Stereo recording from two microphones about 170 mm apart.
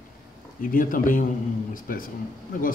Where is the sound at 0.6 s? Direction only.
55° left (ahead or behind).